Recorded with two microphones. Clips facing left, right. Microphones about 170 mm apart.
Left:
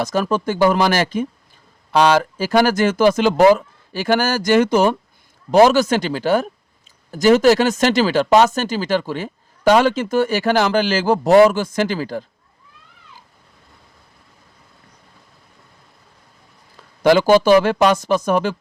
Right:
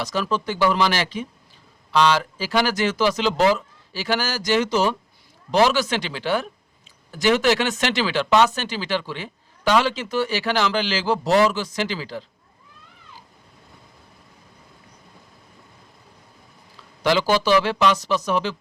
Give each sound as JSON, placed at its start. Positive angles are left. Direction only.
{"t": 0.0, "sound": "speech", "side_deg": 50}
{"t": 17.0, "sound": "speech", "side_deg": 50}